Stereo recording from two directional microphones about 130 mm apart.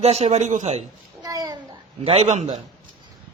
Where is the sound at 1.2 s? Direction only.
30° right (ahead or behind).